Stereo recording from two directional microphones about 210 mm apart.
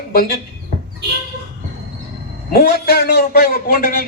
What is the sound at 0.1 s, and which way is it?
Speech, 45° left (ahead or behind).